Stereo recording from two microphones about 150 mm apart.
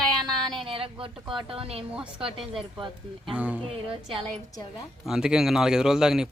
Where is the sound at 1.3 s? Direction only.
35° right (ahead or behind).